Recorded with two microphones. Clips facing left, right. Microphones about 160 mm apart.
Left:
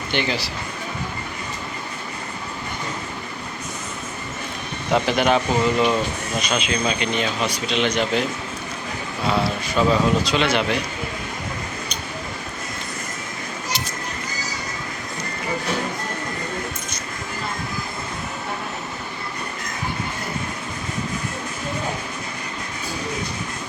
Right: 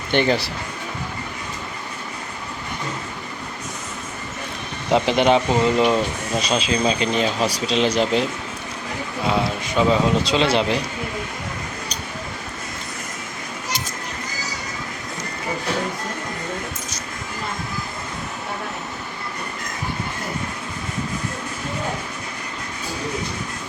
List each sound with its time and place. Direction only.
0.1 s speech: 50° right (ahead or behind)
4.9 s speech: 25° right (ahead or behind)
6.5 s speech: 30° right (ahead or behind)
9.2 s speech: 20° right (ahead or behind)